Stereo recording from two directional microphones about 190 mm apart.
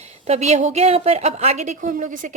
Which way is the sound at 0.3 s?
35° right (ahead or behind).